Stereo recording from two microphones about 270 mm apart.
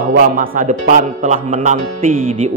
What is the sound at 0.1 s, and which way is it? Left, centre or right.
Speech, right.